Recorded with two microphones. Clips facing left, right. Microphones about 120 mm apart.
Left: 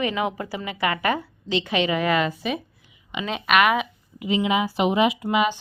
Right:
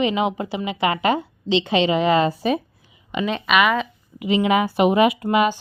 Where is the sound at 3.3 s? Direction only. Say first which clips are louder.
Even; centre (ahead or behind).